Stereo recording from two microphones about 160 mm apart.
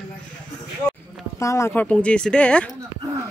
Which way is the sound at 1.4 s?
20° left (ahead or behind).